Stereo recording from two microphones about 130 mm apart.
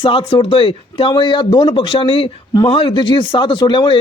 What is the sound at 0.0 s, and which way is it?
Speech, 40° left (ahead or behind).